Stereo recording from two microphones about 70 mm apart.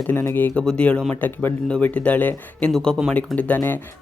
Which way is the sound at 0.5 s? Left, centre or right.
Centre.